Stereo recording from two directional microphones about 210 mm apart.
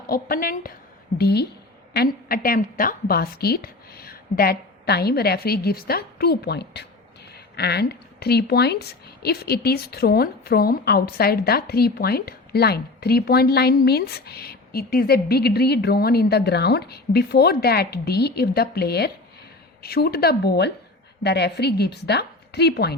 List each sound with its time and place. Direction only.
0.1 s a woman's voice: 45° left (ahead or behind)